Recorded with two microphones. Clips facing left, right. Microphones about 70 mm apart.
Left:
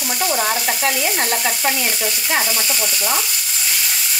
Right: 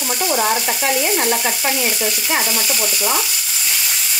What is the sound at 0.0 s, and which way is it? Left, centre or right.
Frying, centre.